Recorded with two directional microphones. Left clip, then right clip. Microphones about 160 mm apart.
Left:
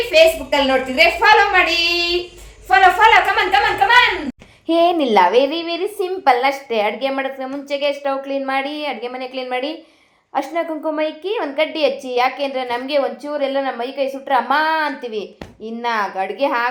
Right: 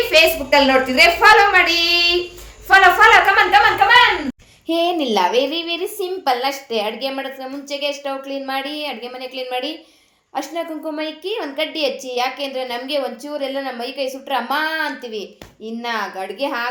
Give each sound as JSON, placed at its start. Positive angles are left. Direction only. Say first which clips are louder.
{"t": 0.1, "sound": "a woman's voice", "louder": "left 1 dB", "side_deg": 0}
{"t": 4.6, "sound": "a woman's voice", "louder": "left 4 dB", "side_deg": 20}